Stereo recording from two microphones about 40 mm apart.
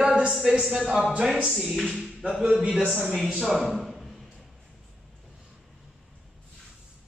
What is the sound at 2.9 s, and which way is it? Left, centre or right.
Speech, centre.